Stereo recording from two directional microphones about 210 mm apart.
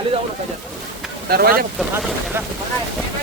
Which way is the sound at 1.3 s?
45° right (ahead or behind).